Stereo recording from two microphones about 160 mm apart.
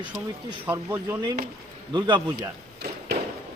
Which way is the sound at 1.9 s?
30° right (ahead or behind).